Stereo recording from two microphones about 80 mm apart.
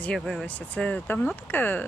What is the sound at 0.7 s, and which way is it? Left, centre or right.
Speech, centre.